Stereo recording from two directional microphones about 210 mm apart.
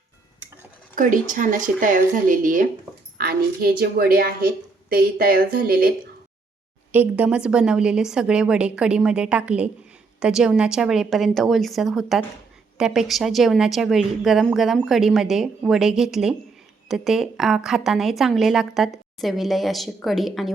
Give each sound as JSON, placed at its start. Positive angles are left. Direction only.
{"t": 0.9, "sound": "a woman's voice", "side_deg": -40}
{"t": 6.9, "sound": "a woman's voice", "side_deg": -10}